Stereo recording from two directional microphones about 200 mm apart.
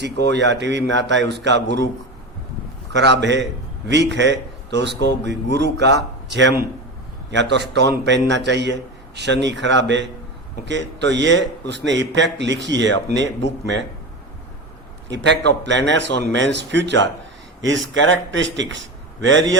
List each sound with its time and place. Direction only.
0.0 s a man's voice: 60° right (ahead or behind)
3.0 s a man's voice: 60° right (ahead or behind)
15.1 s a man's voice: 60° right (ahead or behind)